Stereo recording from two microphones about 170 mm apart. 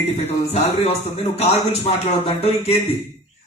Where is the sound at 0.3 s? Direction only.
40° left (ahead or behind).